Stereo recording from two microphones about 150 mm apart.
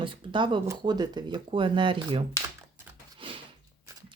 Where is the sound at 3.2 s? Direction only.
35° right (ahead or behind).